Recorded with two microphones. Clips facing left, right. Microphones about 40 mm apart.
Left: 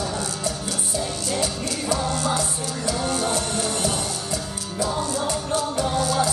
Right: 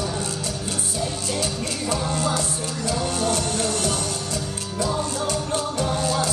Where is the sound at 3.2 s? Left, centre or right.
Left.